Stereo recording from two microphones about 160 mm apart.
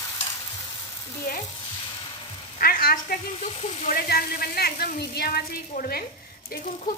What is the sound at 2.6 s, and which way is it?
Speech, 65° left (ahead or behind).